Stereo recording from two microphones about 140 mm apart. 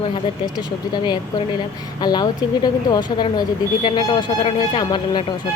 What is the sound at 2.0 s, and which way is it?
Speech, 30° left (ahead or behind).